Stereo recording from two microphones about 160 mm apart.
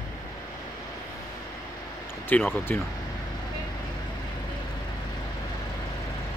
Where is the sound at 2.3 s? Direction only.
10° left (ahead or behind).